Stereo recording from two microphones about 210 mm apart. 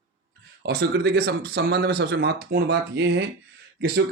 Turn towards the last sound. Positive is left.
turn(degrees=-50)  # may be behind; listen again after turning